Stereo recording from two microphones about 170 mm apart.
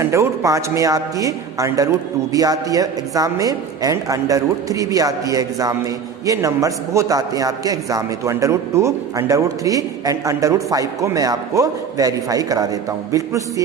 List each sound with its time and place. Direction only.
0.0 s a man's voice: 15° right (ahead or behind)